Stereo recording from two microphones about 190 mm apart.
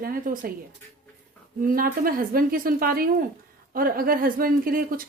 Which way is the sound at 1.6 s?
45° right (ahead or behind).